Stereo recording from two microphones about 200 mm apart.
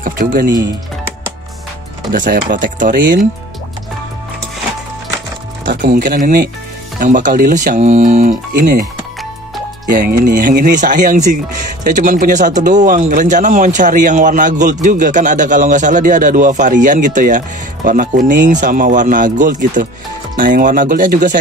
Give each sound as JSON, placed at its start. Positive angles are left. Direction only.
{"t": 0.0, "sound": "speech", "side_deg": -45}
{"t": 2.1, "sound": "a man's voice", "side_deg": -40}
{"t": 5.7, "sound": "a man's voice", "side_deg": -45}
{"t": 9.8, "sound": "a man's voice", "side_deg": -45}